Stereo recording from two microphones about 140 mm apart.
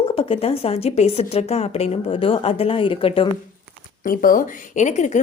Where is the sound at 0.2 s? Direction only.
40° left (ahead or behind).